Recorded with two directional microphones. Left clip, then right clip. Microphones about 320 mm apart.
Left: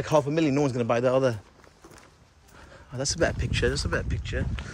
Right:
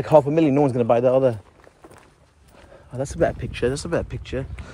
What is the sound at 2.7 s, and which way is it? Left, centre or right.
Speech, centre.